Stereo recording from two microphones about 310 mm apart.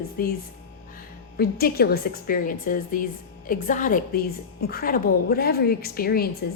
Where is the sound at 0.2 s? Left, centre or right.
Left.